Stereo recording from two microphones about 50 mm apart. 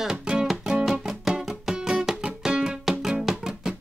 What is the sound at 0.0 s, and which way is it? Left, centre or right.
Music, centre.